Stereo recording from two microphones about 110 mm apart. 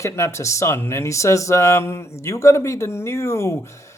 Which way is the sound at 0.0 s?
25° left (ahead or behind).